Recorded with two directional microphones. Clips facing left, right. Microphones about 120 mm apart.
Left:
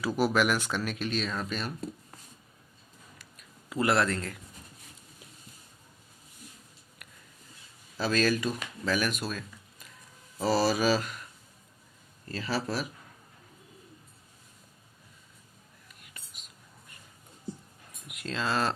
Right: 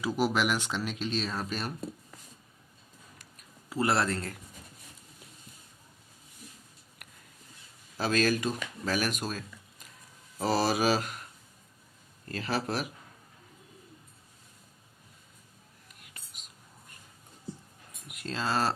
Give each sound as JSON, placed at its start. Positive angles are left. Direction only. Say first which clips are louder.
{"t": 0.2, "sound": "speech", "louder": "left 2 dB", "side_deg": -15}
{"t": 1.1, "sound": "speech", "louder": "left 1 dB", "side_deg": -35}
{"t": 3.2, "sound": "a sound", "louder": "even", "side_deg": -40}
{"t": 3.8, "sound": "speech", "louder": "left 1 dB", "side_deg": -30}
{"t": 7.9, "sound": "speech", "louder": "even", "side_deg": -50}
{"t": 10.4, "sound": "speech", "louder": "left 1 dB", "side_deg": -50}
{"t": 12.3, "sound": "speech", "louder": "even", "side_deg": -55}
{"t": 18.1, "sound": "speech", "louder": "even", "side_deg": -40}